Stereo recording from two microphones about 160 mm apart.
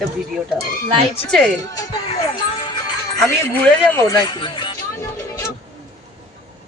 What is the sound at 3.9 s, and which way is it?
Speech, 20° left (ahead or behind).